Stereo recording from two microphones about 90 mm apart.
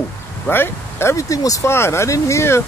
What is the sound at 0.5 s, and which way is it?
Speech, 25° left (ahead or behind).